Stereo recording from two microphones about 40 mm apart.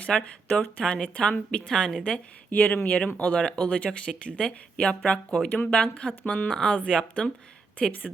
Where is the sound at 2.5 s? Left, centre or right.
Left.